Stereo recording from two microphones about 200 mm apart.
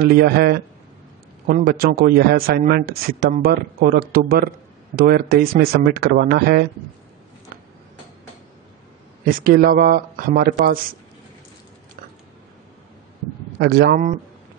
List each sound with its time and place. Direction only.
0.0 s speech: 50° right (ahead or behind)
9.2 s speech: 45° right (ahead or behind)
13.6 s speech: 50° right (ahead or behind)